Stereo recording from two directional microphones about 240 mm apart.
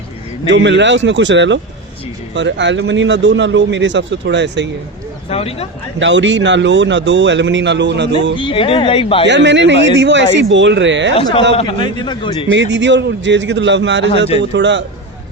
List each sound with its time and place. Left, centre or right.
0.5 s a man's voice: right
5.3 s a man's voice: left
6.0 s a man's voice: right
8.4 s a man's voice: left
9.2 s a man's voice: right
11.2 s a man's voice: left
12.5 s a man's voice: right